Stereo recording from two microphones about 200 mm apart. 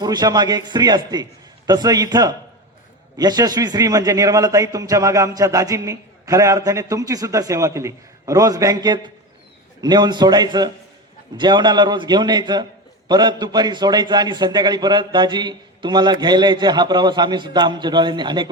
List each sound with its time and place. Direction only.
0.0 s a man's voice: 20° right (ahead or behind)